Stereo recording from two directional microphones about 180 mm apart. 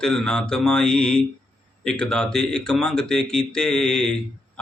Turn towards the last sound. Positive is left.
turn(degrees=5)  # may be behind; listen again after turning